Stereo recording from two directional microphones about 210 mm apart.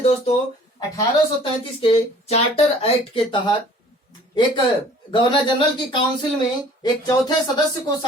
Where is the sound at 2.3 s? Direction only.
30° left (ahead or behind).